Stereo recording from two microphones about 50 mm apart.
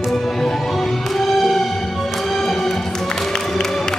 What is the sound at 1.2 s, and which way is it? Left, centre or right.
Music, centre.